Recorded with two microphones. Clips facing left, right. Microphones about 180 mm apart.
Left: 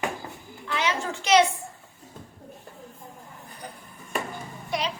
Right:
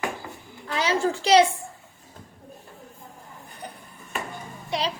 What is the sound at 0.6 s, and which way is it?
Speech, 35° right (ahead or behind).